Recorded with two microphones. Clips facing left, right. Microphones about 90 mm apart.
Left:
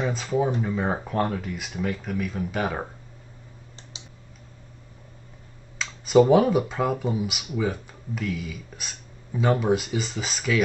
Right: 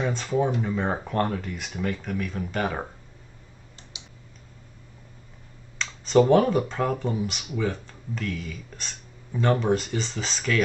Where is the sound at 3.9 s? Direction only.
30° left (ahead or behind).